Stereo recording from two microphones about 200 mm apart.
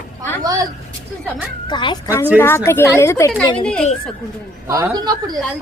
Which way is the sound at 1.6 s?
25° left (ahead or behind).